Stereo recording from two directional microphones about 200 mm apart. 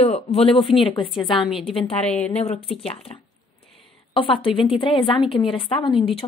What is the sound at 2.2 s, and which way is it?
A woman's voice, 35° left (ahead or behind).